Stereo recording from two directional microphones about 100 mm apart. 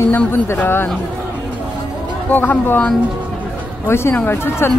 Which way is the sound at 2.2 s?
15° left (ahead or behind).